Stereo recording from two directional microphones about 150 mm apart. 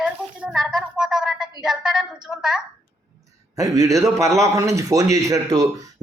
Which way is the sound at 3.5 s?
20° right (ahead or behind).